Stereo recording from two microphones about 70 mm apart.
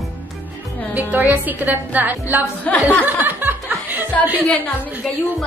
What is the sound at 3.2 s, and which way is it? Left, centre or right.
Music, right.